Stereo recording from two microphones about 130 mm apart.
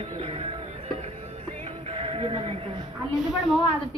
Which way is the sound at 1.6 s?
45° right (ahead or behind).